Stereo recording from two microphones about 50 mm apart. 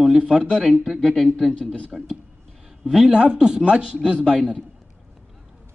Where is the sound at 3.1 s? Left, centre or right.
Centre.